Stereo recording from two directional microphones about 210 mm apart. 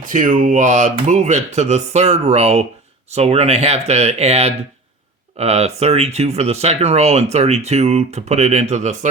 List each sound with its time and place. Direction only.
0.0 s speech: 40° right (ahead or behind)